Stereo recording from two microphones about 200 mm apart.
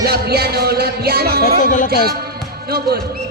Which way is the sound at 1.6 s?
40° left (ahead or behind).